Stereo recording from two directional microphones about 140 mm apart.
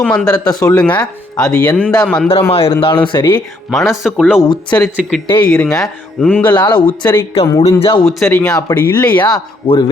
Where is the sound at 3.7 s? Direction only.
Centre (ahead or behind).